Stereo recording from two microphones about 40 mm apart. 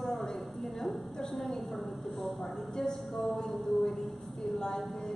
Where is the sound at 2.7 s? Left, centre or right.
Centre.